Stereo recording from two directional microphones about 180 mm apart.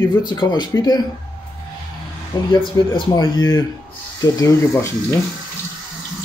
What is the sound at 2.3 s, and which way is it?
Speech, 25° left (ahead or behind).